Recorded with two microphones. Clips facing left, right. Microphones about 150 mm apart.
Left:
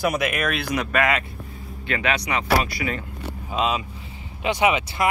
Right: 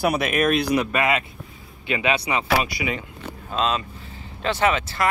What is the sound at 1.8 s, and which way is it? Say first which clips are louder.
Speech: right 2 dB; 15° right (ahead or behind).